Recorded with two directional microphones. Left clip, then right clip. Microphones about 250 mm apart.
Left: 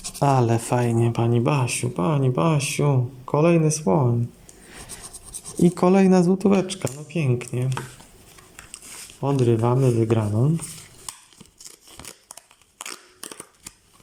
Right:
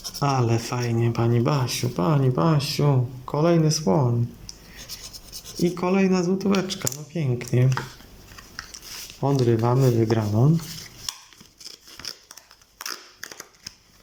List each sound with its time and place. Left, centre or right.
0.2 s speech: centre
5.5 s speech: centre
9.2 s speech: centre
11.6 s crumpling: centre
12.8 s a sound: centre